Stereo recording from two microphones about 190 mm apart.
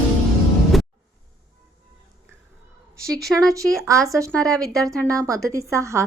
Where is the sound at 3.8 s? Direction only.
15° right (ahead or behind).